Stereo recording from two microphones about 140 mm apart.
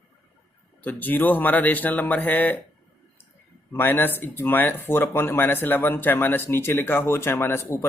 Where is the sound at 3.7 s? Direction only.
15° left (ahead or behind).